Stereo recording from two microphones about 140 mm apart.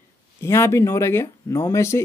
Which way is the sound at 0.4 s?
20° left (ahead or behind).